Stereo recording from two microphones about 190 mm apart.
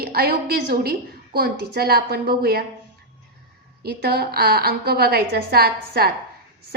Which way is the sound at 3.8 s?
55° right (ahead or behind).